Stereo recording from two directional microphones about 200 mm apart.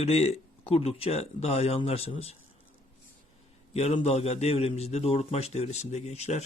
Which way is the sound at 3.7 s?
30° left (ahead or behind).